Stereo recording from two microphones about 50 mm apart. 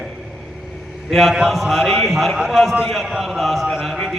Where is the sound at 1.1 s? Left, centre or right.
Centre.